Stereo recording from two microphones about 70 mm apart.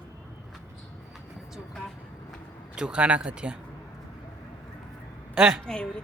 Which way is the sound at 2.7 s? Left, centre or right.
Centre.